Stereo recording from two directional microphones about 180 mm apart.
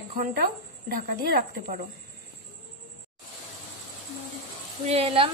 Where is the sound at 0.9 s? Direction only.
55° right (ahead or behind).